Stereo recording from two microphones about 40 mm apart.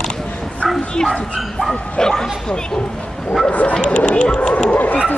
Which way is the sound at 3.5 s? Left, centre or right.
Left.